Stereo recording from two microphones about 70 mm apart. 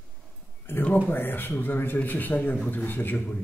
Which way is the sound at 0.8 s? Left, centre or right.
Left.